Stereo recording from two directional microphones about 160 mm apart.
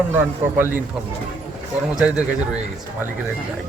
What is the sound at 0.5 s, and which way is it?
Speech, 10° right (ahead or behind).